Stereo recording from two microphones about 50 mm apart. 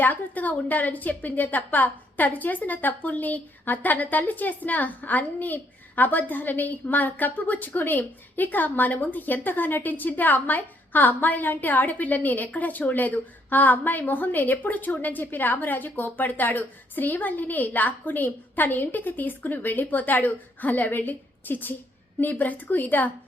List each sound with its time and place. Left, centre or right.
0.0 s a woman's voice: left